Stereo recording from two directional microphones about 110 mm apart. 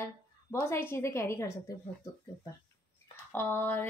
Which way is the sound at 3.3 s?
15° left (ahead or behind).